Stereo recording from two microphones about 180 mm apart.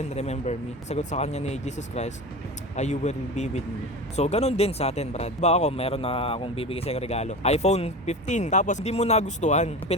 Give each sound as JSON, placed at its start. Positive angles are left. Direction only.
{"t": 0.1, "sound": "speech", "side_deg": 40}